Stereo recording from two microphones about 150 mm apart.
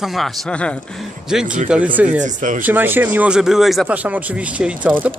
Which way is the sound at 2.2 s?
55° right (ahead or behind).